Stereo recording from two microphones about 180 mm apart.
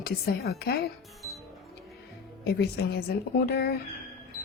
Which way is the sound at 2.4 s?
65° left (ahead or behind).